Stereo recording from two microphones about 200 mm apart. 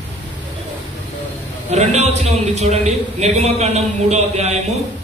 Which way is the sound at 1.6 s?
35° right (ahead or behind).